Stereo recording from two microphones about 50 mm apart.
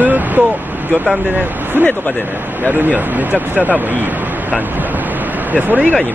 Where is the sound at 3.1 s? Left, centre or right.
Right.